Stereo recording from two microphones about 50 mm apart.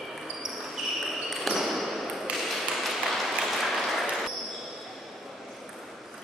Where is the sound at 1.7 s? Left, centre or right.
Centre.